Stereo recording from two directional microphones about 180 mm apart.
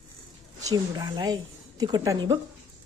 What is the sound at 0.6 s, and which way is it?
Speech, 20° right (ahead or behind).